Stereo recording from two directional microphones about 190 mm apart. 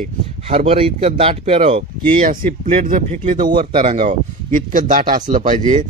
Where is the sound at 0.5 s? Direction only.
30° right (ahead or behind).